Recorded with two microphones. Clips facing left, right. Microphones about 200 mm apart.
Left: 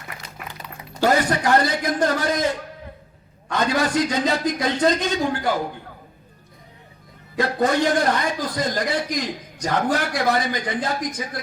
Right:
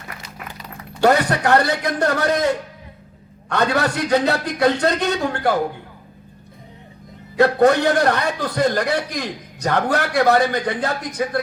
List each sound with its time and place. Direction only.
1.0 s a man's voice: 65° right (ahead or behind)
3.5 s a man's voice: 65° right (ahead or behind)
7.3 s a man's voice: 65° right (ahead or behind)